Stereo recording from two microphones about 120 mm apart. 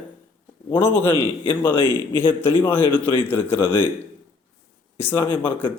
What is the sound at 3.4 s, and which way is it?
Speech, 45° left (ahead or behind).